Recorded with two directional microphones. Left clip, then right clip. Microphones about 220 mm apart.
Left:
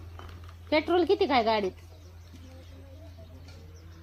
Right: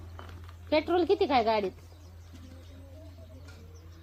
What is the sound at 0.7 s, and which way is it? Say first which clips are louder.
A woman's voice: left 1 dB; 25° left (ahead or behind).